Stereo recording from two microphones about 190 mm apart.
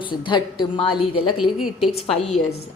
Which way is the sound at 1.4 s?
Centre (ahead or behind).